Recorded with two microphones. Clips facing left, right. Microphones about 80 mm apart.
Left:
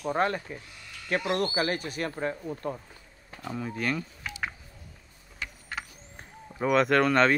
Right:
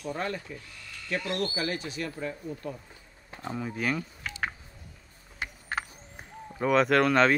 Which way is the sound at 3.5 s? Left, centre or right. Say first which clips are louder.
Even; centre.